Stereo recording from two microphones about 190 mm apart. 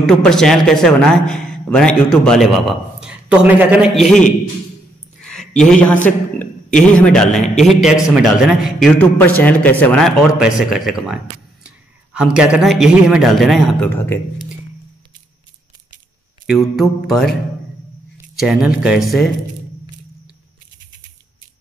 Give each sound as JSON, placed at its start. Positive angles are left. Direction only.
{"t": 0.0, "sound": "a man's voice", "side_deg": 0}
{"t": 5.4, "sound": "a sound", "side_deg": 35}
{"t": 6.0, "sound": "a man's voice", "side_deg": 10}
{"t": 13.8, "sound": "speech", "side_deg": 10}
{"t": 16.4, "sound": "a man's voice", "side_deg": 0}